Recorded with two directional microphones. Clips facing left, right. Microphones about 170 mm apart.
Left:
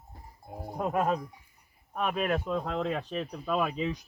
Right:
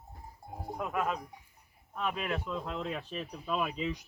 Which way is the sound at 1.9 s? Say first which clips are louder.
Left 5 dB; 60° left (ahead or behind).